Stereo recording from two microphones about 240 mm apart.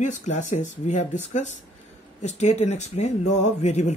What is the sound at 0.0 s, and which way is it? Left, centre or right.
Speech, left.